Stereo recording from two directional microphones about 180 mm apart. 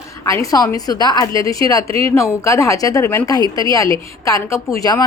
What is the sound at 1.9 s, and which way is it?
Speech, 30° right (ahead or behind).